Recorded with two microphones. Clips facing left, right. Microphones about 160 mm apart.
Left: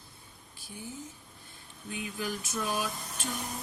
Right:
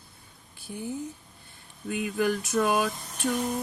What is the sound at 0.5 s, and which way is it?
Speech, 60° right (ahead or behind).